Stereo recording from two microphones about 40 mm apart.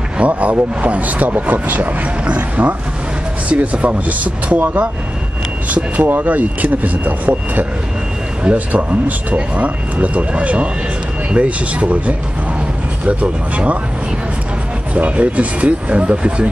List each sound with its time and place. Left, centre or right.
0.2 s speech: right
6.2 s speech: right
15.0 s speech: right